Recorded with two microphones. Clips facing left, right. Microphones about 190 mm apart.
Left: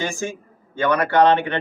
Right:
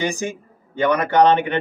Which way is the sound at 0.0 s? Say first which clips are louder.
Right 2 dB; 15° right (ahead or behind).